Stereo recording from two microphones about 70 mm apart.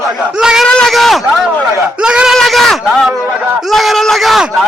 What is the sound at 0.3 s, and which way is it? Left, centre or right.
Speech, centre.